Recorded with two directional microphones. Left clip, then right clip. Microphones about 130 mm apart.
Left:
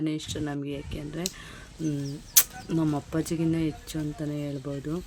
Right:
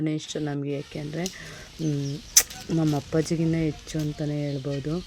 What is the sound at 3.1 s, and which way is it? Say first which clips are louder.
Speech: right 3 dB; 25° right (ahead or behind).